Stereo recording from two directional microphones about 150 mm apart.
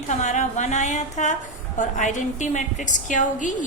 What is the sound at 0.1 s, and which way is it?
A woman's voice, 50° left (ahead or behind).